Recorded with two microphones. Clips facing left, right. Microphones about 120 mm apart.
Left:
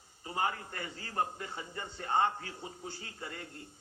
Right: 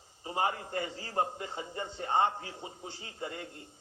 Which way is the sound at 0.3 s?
25° right (ahead or behind).